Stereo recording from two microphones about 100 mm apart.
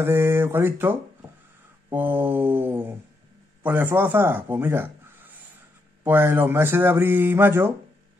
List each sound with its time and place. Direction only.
0.0 s speech: 25° right (ahead or behind)